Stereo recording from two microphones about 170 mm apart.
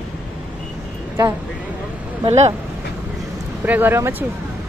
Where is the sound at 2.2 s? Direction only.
40° right (ahead or behind).